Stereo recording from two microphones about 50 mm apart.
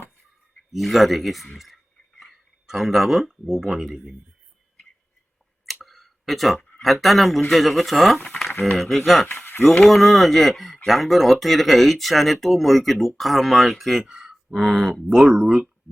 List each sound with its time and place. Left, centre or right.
0.7 s speech: centre
1.5 s a sound: centre
5.8 s a sound: centre
6.7 s speech: centre
9.2 s speech: left
9.6 s speech: centre
15.0 s speech: centre